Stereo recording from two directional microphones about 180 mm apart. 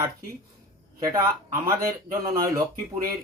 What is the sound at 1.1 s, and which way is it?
Speech, 20° right (ahead or behind).